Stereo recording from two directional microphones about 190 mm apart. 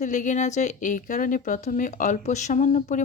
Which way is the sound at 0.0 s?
40° left (ahead or behind).